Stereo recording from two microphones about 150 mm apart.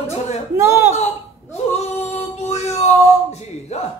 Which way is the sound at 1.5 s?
45° left (ahead or behind).